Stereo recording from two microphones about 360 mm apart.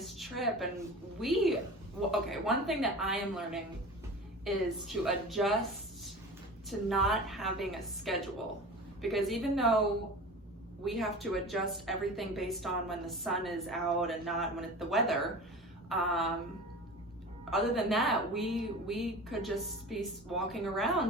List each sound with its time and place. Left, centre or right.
0.0 s a sound: centre
1.2 s a woman's voice: centre
6.7 s a woman's voice: centre
10.8 s a woman's voice: centre
17.5 s a woman's voice: centre